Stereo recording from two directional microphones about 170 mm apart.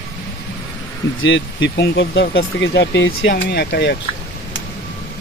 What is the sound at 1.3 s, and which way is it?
Speech, 90° left.